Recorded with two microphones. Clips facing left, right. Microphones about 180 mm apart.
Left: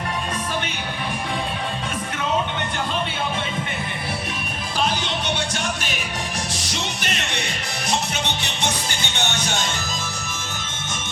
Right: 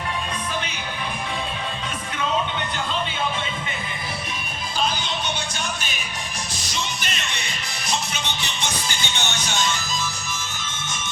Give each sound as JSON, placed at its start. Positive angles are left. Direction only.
{"t": 4.8, "sound": "music", "side_deg": 75}